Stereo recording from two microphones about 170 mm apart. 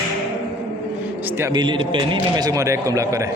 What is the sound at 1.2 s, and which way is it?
Speech, 10° right (ahead or behind).